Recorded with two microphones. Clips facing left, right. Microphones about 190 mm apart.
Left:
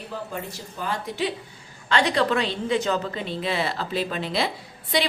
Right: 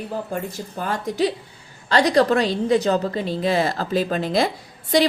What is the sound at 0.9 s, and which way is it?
A woman's voice, 40° right (ahead or behind).